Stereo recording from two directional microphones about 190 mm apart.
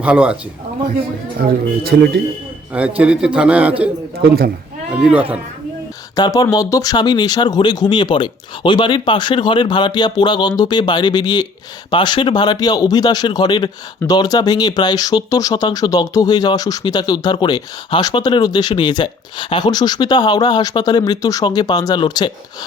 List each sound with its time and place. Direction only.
0.0 s speech: 5° right (ahead or behind)
1.9 s speech: 55° right (ahead or behind)
3.0 s a man's voice: 5° right (ahead or behind)
4.9 s speech: 5° right (ahead or behind)
6.1 s speech: 20° left (ahead or behind)